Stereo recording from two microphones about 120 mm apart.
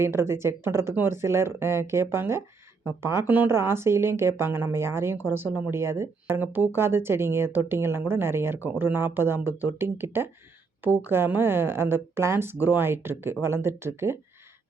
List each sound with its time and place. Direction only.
0.0 s speech: 20° right (ahead or behind)